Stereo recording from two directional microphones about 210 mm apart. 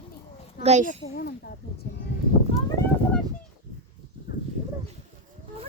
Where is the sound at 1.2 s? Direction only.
45° left (ahead or behind).